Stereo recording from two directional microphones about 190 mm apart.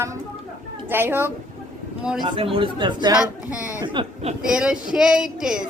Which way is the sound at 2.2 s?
25° right (ahead or behind).